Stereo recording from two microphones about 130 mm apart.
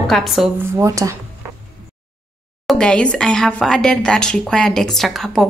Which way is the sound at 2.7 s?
5° left (ahead or behind).